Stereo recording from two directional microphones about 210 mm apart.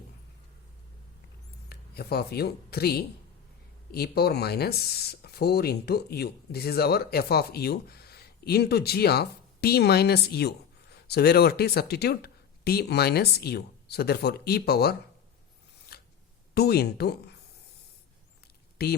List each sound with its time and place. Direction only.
1.7 s a woman's voice: 50° left (ahead or behind)
15.9 s a sound: 45° left (ahead or behind)
16.6 s speech: 50° left (ahead or behind)
18.8 s speech: 50° left (ahead or behind)